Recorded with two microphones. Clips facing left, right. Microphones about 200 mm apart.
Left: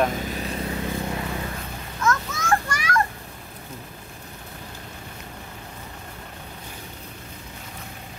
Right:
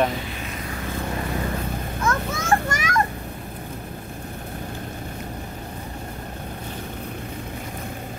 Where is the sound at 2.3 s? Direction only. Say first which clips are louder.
Right 2 dB; 25° right (ahead or behind).